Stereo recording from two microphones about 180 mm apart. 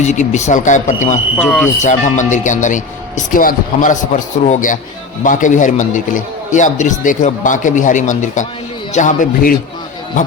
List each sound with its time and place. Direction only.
0.0 s a man's voice: 40° left (ahead or behind)
1.4 s speech: centre (ahead or behind)
1.8 s a man's voice: 40° left (ahead or behind)